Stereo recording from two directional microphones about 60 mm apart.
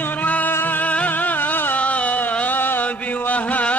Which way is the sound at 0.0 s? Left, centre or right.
Left.